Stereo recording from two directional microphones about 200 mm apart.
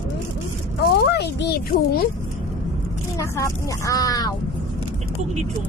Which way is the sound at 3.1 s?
15° left (ahead or behind).